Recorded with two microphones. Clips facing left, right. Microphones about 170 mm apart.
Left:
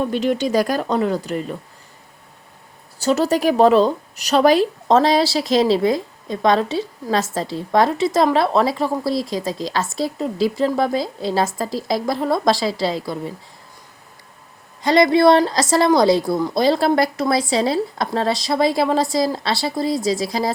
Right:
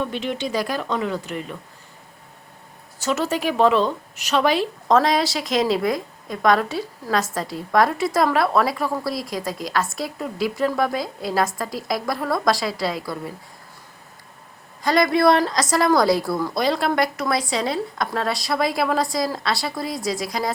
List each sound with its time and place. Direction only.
0.0 s a woman's voice: 40° left (ahead or behind)
3.0 s a woman's voice: 35° left (ahead or behind)
14.8 s a woman's voice: 25° left (ahead or behind)